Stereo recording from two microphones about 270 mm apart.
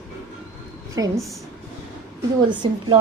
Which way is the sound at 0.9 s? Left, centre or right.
Centre.